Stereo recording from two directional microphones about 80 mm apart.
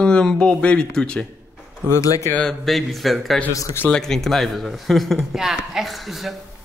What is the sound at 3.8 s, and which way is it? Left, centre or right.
Speech, centre.